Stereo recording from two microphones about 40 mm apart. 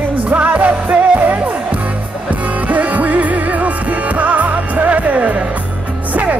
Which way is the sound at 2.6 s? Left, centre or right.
Right.